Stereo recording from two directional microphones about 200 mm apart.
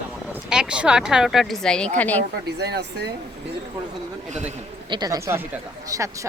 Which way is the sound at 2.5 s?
55° right (ahead or behind).